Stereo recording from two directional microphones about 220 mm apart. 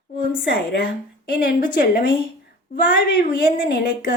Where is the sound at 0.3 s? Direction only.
45° left (ahead or behind).